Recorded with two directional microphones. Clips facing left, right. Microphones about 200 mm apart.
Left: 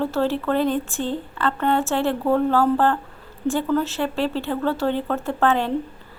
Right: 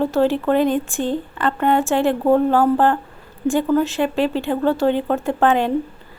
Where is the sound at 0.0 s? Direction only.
15° right (ahead or behind).